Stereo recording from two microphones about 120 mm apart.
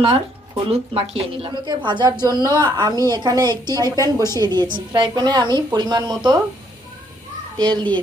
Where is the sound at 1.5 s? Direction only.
40° right (ahead or behind).